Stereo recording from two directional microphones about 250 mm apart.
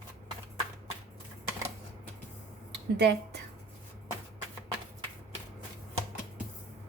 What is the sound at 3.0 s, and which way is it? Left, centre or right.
Speech, right.